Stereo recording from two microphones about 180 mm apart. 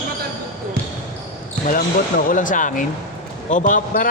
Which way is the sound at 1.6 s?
50° left (ahead or behind).